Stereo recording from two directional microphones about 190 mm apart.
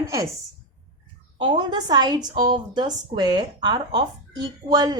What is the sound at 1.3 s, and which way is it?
Speech, 25° right (ahead or behind).